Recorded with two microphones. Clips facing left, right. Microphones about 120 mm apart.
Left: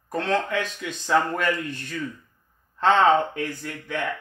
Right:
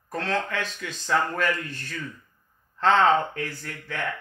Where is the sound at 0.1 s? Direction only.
20° left (ahead or behind).